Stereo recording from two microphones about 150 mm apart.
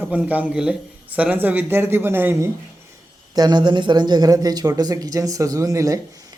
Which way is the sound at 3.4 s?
30° right (ahead or behind).